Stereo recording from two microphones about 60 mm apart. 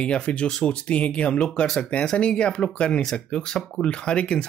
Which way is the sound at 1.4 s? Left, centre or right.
Centre.